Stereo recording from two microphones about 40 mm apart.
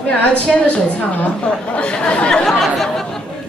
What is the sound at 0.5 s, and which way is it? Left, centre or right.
Speech, centre.